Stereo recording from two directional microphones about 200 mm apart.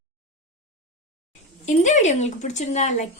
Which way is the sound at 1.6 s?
35° left (ahead or behind).